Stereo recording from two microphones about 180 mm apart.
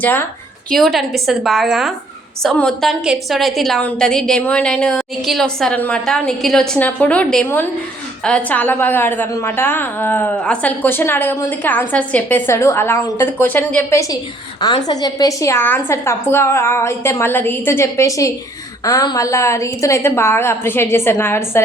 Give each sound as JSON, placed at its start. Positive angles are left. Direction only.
{"t": 0.0, "sound": "a woman's voice", "side_deg": 10}
{"t": 14.8, "sound": "a woman's voice", "side_deg": 20}